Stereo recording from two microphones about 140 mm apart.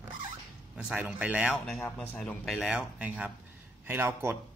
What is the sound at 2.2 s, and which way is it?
A man's voice, centre (ahead or behind).